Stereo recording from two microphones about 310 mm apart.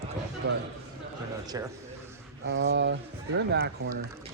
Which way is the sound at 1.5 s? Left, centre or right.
Centre.